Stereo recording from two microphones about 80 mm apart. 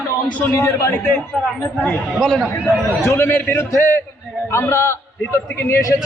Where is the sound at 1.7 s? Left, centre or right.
Centre.